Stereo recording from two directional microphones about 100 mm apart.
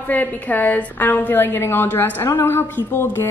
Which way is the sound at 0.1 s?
15° left (ahead or behind).